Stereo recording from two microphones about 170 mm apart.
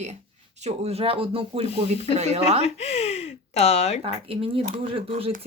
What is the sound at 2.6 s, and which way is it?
Speech, 40° left (ahead or behind).